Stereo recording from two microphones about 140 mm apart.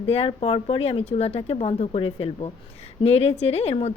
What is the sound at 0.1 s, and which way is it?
A woman's voice, 45° left (ahead or behind).